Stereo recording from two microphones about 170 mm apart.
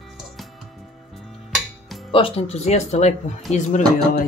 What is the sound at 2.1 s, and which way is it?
Speech, 35° left (ahead or behind).